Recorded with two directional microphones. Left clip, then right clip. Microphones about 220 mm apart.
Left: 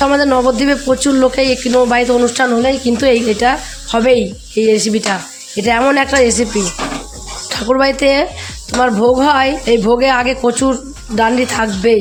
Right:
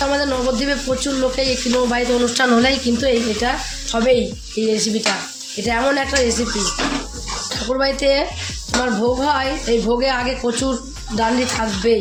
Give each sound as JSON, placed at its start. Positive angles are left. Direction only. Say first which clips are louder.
{"t": 0.0, "sound": "speech", "louder": "left 7 dB", "side_deg": 40}
{"t": 2.5, "sound": "speech", "louder": "left 2 dB", "side_deg": 25}
{"t": 2.8, "sound": "speech", "louder": "left 6 dB", "side_deg": 45}
{"t": 7.5, "sound": "speech", "louder": "left 7 dB", "side_deg": 40}